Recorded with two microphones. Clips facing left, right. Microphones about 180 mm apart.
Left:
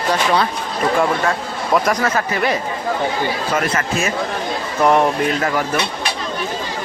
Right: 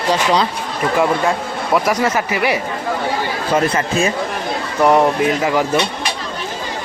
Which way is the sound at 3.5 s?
35° right (ahead or behind).